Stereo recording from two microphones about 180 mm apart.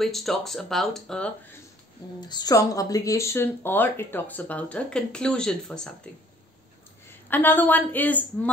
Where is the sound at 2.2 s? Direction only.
20° left (ahead or behind); by 5.8 s 5° left (ahead or behind).